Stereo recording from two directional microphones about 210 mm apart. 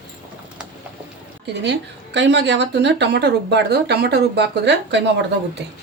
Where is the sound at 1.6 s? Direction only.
55° right (ahead or behind).